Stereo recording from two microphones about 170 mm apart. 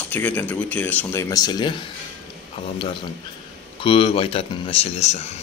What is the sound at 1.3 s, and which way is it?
Speech, 25° left (ahead or behind).